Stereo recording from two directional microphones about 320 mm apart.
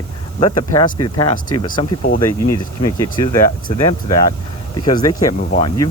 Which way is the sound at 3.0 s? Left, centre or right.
Centre.